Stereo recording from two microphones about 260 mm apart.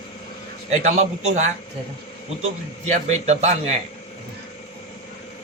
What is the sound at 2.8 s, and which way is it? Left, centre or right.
Speech, right.